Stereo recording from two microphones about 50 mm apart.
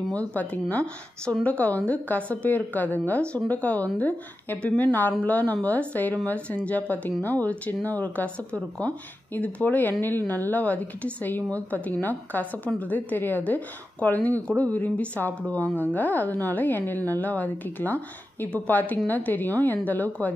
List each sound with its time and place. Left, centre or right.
0.1 s speech: left
8.5 s speech: left